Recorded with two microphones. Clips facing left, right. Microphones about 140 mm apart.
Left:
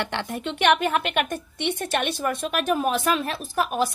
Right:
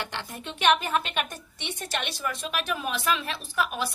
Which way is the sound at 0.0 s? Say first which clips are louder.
Left 7 dB; 60° left (ahead or behind).